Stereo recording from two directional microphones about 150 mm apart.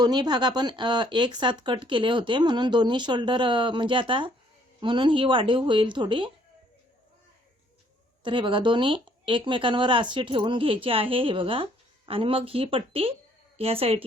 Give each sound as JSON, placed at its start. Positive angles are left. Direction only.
{"t": 0.0, "sound": "speech", "side_deg": -30}
{"t": 8.2, "sound": "speech", "side_deg": -35}